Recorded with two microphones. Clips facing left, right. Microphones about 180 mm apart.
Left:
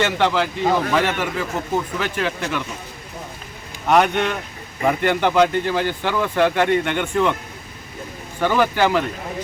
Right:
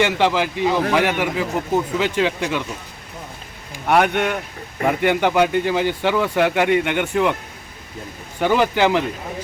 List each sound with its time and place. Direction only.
0.0 s speech: 15° right (ahead or behind)
3.8 s speech: 10° right (ahead or behind)
8.4 s speech: 15° right (ahead or behind)